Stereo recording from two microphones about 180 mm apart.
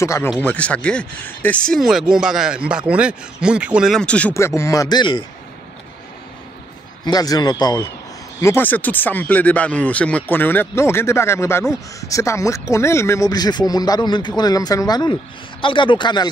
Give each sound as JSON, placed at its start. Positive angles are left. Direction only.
{"t": 0.0, "sound": "speech", "side_deg": 15}
{"t": 7.1, "sound": "speech", "side_deg": 20}